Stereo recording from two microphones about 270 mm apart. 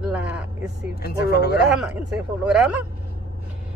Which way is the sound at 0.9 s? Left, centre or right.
Left.